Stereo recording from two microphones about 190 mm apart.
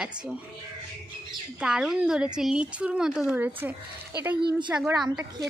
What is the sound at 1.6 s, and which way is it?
A woman's voice, 5° right (ahead or behind).